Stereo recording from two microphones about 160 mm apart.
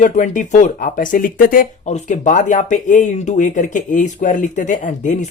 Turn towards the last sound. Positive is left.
turn(degrees=50)  # may be behind; listen again after turning